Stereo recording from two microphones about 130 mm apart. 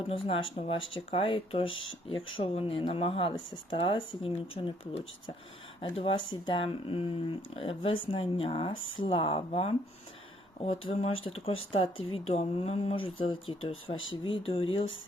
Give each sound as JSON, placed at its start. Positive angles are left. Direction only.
{"t": 0.1, "sound": "speech", "side_deg": 45}